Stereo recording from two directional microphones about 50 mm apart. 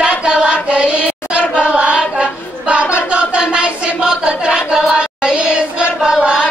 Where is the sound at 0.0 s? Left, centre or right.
Centre.